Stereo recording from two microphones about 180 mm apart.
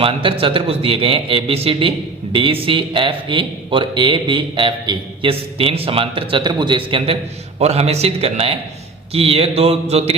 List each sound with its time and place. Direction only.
0.0 s a man's voice: 30° right (ahead or behind)